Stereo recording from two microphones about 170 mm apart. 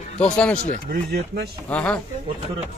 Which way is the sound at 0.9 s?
65° right (ahead or behind).